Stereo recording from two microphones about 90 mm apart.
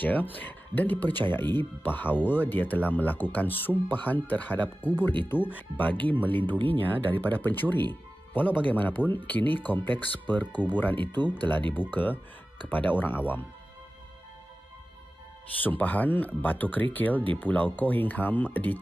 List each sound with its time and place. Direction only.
0.0 s speech: 20° left (ahead or behind)
15.6 s speech: 20° left (ahead or behind)